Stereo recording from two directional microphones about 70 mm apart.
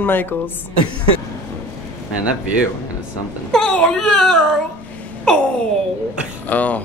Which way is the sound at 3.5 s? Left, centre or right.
Centre.